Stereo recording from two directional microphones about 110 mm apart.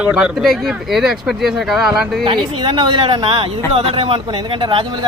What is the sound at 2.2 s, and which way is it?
Speech, 45° right (ahead or behind).